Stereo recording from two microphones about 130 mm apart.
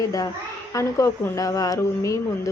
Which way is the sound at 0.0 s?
25° left (ahead or behind).